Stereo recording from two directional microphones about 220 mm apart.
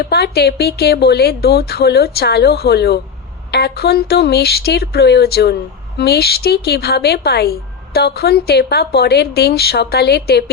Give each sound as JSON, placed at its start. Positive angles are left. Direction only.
{"t": 0.0, "sound": "a woman's voice", "side_deg": 45}